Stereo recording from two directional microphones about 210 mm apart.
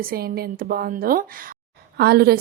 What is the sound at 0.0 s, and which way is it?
A woman's voice, 45° right (ahead or behind).